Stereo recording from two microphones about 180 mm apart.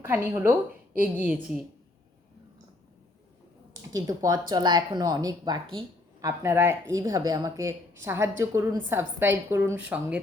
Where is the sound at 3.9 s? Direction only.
20° right (ahead or behind).